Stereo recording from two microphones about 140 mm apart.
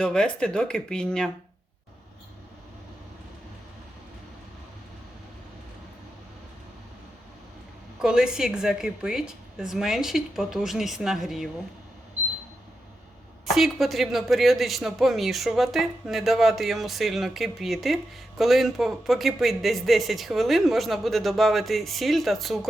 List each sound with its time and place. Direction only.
0.0 s speech: 5° left (ahead or behind)
8.0 s speech: 5° right (ahead or behind)
13.4 s speech: centre (ahead or behind)